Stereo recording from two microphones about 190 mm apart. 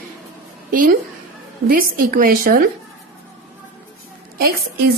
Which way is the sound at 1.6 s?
50° right (ahead or behind).